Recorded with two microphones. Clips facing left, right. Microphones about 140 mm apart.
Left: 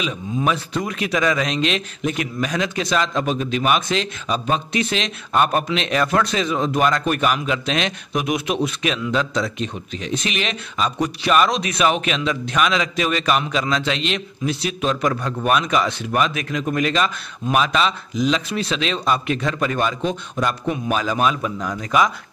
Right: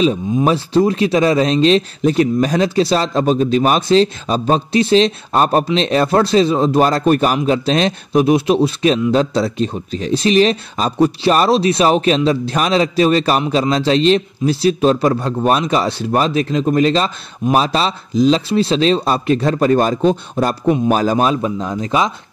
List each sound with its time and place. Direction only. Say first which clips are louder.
0.0 s a man's voice: right 8 dB; 35° right (ahead or behind)